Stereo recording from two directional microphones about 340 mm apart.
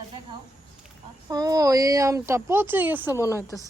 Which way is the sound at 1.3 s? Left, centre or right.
Centre.